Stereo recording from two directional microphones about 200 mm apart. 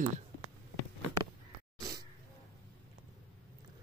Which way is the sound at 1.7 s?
15° right (ahead or behind).